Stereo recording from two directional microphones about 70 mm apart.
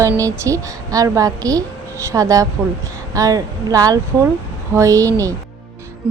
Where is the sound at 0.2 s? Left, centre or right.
Right.